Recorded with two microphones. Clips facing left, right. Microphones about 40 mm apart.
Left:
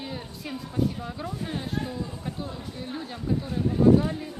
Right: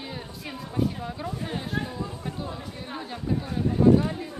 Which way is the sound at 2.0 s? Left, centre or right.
Centre.